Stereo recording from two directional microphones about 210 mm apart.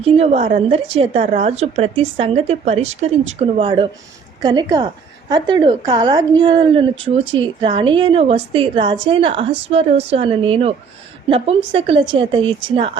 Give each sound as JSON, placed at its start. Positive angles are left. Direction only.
{"t": 0.0, "sound": "a woman's voice", "side_deg": -30}